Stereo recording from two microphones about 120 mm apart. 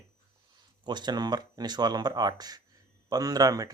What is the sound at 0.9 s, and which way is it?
Speech, 35° right (ahead or behind).